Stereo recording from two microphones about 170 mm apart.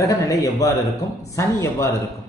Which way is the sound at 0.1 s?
20° left (ahead or behind).